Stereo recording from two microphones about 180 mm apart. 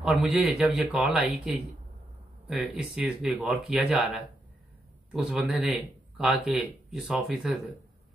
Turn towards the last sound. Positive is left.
turn(degrees=-5)  # may be behind; listen again after turning